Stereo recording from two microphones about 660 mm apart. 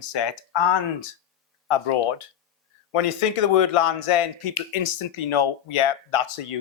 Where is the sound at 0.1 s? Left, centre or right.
Left.